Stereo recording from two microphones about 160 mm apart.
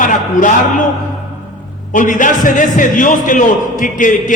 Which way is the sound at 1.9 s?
55° left (ahead or behind).